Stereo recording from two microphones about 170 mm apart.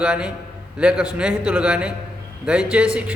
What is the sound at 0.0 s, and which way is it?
A man's voice, 5° right (ahead or behind).